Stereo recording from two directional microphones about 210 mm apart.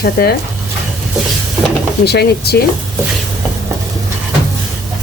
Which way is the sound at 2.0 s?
50° left (ahead or behind).